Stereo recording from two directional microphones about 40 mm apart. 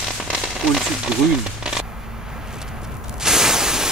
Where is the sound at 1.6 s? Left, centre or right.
Centre.